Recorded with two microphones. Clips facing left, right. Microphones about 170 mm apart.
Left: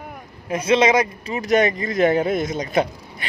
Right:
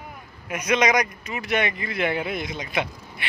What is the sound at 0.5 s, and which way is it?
Speech, 30° left (ahead or behind).